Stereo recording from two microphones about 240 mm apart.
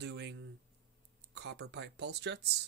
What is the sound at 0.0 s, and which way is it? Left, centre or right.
Speech, right.